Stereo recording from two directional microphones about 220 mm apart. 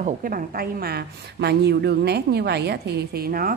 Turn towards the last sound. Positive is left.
turn(degrees=-40)  # may be behind; listen again after turning